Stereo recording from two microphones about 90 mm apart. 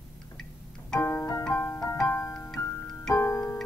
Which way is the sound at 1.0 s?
35° left (ahead or behind).